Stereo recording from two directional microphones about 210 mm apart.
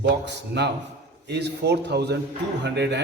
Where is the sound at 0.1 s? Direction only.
55° right (ahead or behind).